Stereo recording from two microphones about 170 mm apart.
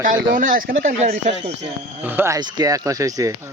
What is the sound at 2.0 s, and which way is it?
Speech, 10° right (ahead or behind).